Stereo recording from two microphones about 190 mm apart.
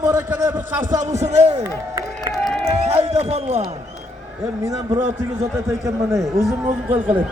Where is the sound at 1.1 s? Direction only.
35° right (ahead or behind).